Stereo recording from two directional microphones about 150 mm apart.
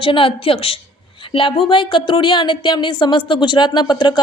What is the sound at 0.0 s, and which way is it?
Speech, 35° left (ahead or behind).